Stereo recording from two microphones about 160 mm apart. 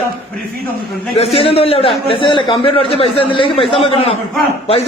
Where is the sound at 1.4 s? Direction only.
35° left (ahead or behind).